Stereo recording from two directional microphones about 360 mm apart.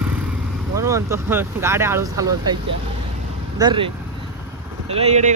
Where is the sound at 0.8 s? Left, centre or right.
Centre.